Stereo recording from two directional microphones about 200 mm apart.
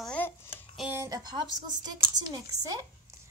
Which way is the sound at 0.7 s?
5° right (ahead or behind).